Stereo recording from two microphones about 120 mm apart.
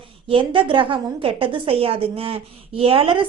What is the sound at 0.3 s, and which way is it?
A woman's voice, 45° right (ahead or behind).